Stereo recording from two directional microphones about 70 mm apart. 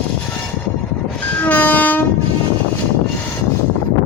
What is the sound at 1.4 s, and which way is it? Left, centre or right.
Train, left.